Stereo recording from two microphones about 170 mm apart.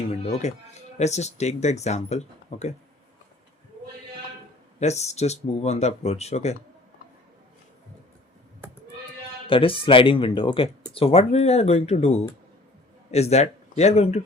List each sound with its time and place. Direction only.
0.3 s speech: 40° left (ahead or behind)
4.8 s speech: 40° left (ahead or behind)
9.5 s speech: 30° left (ahead or behind)